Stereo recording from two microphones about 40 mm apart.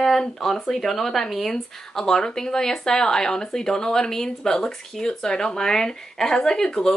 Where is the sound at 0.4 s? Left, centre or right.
Centre.